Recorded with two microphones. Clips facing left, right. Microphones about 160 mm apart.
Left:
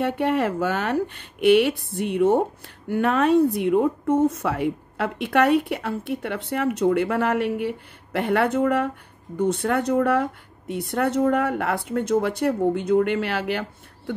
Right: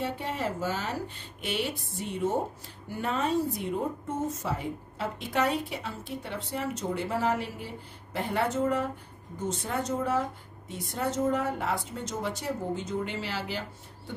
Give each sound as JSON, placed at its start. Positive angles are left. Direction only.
{"t": 0.0, "sound": "a woman's voice", "side_deg": 65}